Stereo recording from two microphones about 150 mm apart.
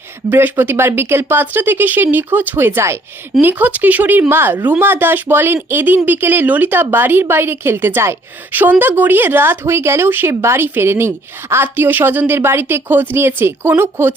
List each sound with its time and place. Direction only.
0.3 s speech: 15° right (ahead or behind)